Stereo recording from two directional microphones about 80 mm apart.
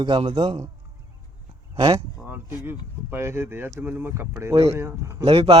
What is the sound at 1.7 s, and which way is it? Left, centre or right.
Speech, right.